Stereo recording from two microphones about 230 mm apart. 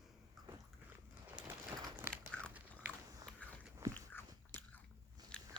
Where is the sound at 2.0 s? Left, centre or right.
Centre.